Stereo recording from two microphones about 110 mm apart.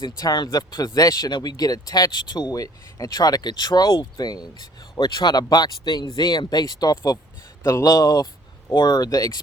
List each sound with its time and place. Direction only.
0.0 s speech: 40° left (ahead or behind)